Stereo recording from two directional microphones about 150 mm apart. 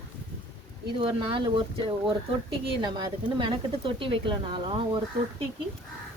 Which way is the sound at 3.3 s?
35° right (ahead or behind).